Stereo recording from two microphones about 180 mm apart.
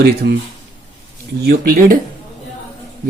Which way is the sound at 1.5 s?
55° right (ahead or behind).